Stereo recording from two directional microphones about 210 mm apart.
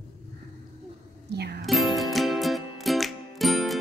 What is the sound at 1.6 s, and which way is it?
Music, centre (ahead or behind).